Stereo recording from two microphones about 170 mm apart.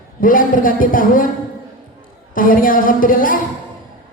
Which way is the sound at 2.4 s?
55° left (ahead or behind).